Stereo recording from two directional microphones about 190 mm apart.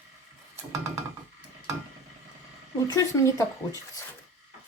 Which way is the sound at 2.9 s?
20° left (ahead or behind).